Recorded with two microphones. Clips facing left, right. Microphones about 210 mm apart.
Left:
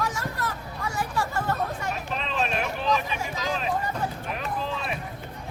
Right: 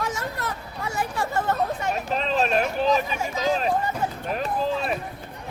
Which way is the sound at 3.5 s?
40° right (ahead or behind).